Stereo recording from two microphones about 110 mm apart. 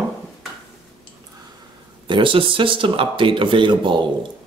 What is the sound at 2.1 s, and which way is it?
Speech, 50° right (ahead or behind).